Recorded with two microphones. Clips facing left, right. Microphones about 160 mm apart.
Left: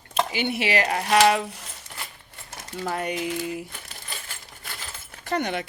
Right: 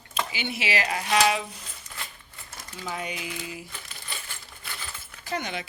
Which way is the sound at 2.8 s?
60° left (ahead or behind).